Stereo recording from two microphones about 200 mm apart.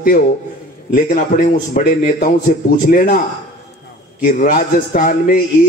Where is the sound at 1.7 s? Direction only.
40° left (ahead or behind).